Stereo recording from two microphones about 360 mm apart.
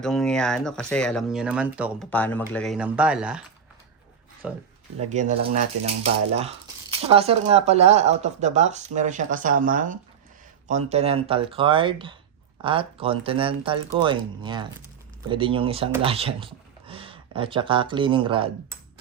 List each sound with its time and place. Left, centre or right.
0.0 s speech: centre
4.4 s speech: centre
5.0 s speech: centre